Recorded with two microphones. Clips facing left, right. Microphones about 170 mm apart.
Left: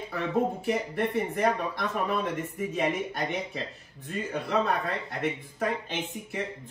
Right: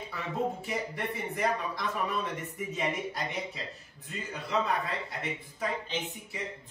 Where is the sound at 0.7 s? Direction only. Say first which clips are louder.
Left 6 dB; 60° left (ahead or behind).